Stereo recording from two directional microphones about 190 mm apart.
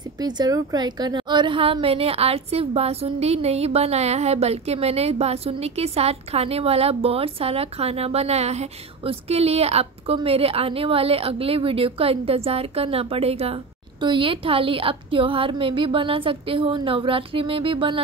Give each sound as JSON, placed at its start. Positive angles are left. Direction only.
{"t": 0.2, "sound": "a woman's voice", "side_deg": -20}